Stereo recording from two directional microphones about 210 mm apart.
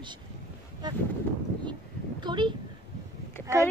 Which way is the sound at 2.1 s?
20° right (ahead or behind).